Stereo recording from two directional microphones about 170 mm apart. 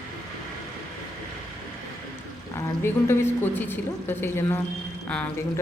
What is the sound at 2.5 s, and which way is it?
A woman's voice, 15° left (ahead or behind).